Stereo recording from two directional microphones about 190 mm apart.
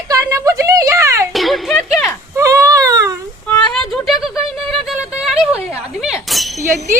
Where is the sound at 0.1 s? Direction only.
15° right (ahead or behind).